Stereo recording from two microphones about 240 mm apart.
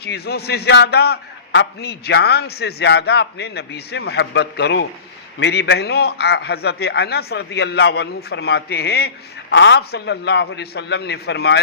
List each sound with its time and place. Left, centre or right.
0.0 s a man's voice: left